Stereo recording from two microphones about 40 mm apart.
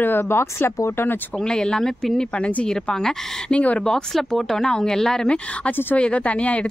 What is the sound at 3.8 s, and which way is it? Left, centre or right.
Speech, centre.